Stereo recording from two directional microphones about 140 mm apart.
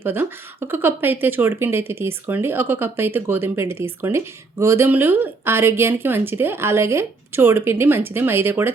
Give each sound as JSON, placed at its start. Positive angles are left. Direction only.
{"t": 0.0, "sound": "speech", "side_deg": -15}